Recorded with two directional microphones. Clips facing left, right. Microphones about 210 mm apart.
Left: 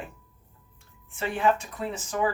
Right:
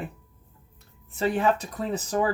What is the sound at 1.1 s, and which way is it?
Speech, 40° right (ahead or behind).